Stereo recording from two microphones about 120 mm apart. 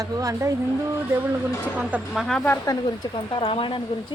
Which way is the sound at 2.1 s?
Centre (ahead or behind).